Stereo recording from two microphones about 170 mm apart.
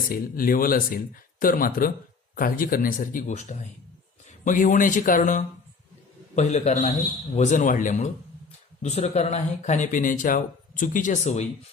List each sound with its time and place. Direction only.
0.1 s a man's voice: 60° left (ahead or behind); by 11.4 s 45° left (ahead or behind)